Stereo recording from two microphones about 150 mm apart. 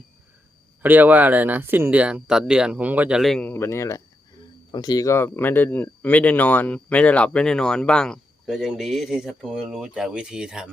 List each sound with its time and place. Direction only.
0.8 s speech: 10° right (ahead or behind)
3.5 s speech: 15° left (ahead or behind); by 10.7 s 5° right (ahead or behind)